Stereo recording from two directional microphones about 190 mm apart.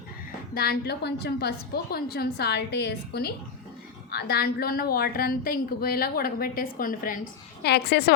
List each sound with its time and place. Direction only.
0.5 s a woman's voice: 55° left (ahead or behind)
7.6 s a woman's voice: 60° left (ahead or behind)